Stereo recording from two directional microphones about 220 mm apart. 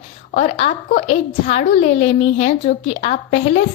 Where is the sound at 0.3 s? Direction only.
30° left (ahead or behind).